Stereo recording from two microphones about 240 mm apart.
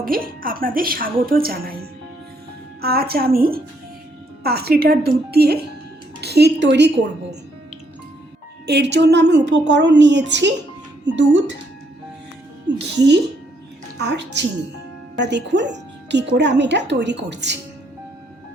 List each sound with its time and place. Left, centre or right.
0.1 s speech: right
2.8 s speech: right
8.6 s speech: right
12.8 s speech: right
15.2 s speech: right